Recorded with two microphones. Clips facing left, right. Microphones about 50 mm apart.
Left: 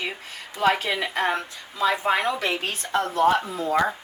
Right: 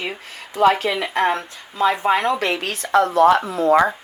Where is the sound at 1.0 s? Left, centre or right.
Right.